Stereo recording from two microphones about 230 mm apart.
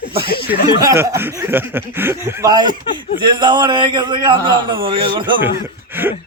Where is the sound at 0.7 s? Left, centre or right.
Centre.